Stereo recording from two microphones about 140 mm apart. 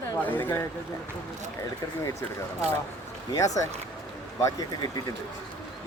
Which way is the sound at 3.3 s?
25° left (ahead or behind).